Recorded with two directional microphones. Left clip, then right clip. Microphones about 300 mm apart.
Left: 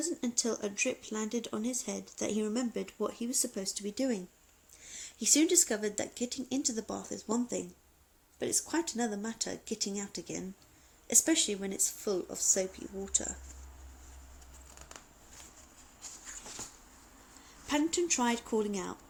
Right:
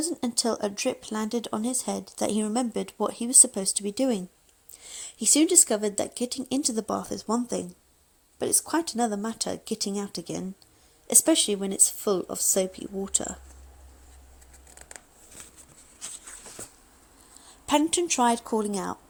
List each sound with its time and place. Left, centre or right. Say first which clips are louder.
0.0 s speech: right 6 dB; right
17.7 s speech: right 7 dB; right